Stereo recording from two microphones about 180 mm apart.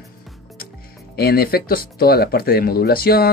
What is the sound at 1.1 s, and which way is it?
Speech, 60° left (ahead or behind).